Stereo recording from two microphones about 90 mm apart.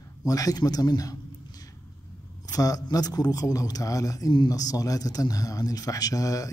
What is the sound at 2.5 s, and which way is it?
A man's voice, 45° left (ahead or behind).